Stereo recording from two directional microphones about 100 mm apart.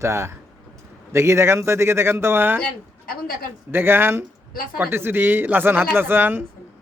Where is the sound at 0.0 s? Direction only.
30° right (ahead or behind).